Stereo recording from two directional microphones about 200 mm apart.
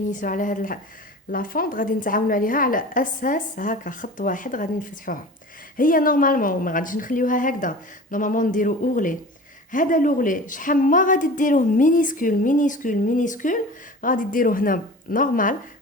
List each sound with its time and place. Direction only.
0.1 s a woman's voice: 40° left (ahead or behind)